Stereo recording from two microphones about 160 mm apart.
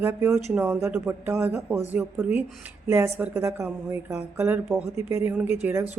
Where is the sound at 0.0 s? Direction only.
15° right (ahead or behind).